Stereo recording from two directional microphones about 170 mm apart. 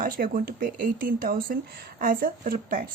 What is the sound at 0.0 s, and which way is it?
A woman's voice, 55° right (ahead or behind).